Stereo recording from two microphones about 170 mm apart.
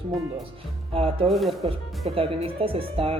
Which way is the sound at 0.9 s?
35° right (ahead or behind).